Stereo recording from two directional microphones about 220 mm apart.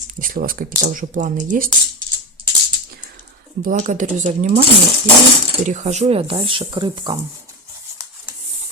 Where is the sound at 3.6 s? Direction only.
35° right (ahead or behind).